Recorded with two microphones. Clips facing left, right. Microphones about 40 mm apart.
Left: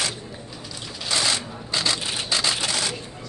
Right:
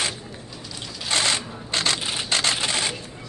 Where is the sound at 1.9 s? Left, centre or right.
Right.